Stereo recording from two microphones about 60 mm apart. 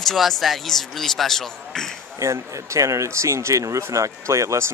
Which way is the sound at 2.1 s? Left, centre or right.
Right.